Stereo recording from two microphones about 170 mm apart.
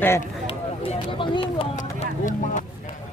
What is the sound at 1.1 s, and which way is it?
Speech, 30° left (ahead or behind).